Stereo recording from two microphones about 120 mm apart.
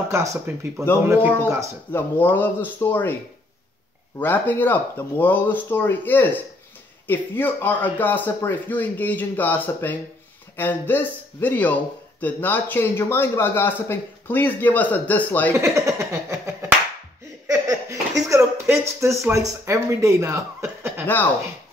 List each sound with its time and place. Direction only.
0.1 s speech: 25° right (ahead or behind)
1.9 s speech: 15° left (ahead or behind)
4.2 s speech: 15° left (ahead or behind)
15.5 s a sound: 25° right (ahead or behind)
19.6 s speech: 25° right (ahead or behind)